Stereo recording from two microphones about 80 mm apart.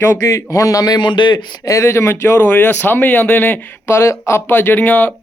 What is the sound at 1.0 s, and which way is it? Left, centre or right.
Speech, left.